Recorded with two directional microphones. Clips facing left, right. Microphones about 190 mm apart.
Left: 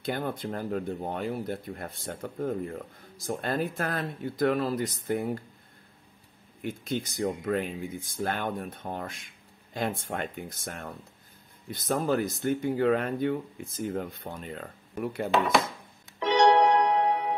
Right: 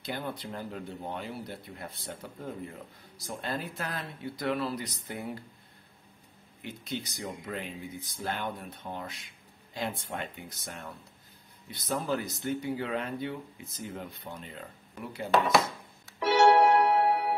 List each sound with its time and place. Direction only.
0.0 s speech: 50° left (ahead or behind)
6.6 s speech: 50° left (ahead or behind)
16.2 s keyboard: 10° right (ahead or behind)